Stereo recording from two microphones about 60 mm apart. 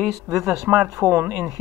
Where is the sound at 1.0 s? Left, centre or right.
Right.